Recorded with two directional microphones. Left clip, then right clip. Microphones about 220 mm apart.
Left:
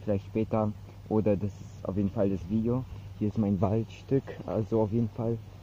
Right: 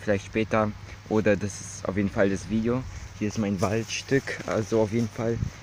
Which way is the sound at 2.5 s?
45° right (ahead or behind).